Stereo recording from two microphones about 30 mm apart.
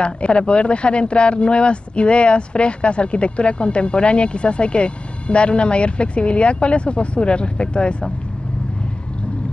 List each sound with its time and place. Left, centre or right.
0.0 s speech: left